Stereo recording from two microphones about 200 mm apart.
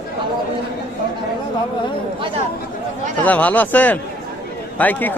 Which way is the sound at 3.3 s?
5° left (ahead or behind).